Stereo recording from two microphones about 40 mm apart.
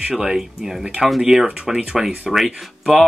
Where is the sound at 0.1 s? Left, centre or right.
Centre.